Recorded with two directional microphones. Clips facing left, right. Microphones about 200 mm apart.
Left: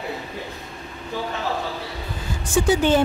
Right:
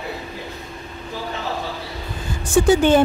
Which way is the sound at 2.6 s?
55° right (ahead or behind).